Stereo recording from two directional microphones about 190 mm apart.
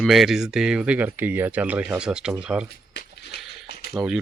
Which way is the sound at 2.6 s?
60° left (ahead or behind).